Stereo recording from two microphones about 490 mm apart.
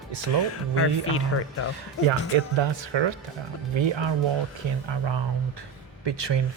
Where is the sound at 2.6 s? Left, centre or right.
Right.